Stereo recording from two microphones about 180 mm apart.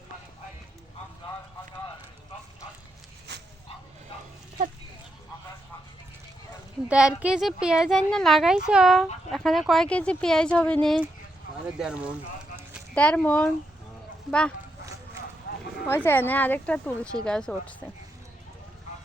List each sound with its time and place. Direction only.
6.8 s a woman's voice: 5° right (ahead or behind)
12.9 s a woman's voice: 5° left (ahead or behind)
15.5 s a sound: 65° left (ahead or behind)
15.9 s a woman's voice: 10° left (ahead or behind)